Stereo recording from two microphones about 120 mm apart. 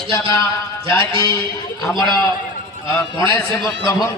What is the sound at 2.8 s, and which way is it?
Speech, 25° left (ahead or behind).